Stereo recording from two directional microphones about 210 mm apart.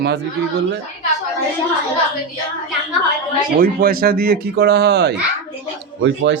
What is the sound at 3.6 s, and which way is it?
Speech, 45° right (ahead or behind).